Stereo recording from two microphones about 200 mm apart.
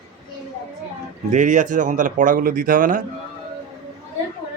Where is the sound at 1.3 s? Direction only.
40° right (ahead or behind).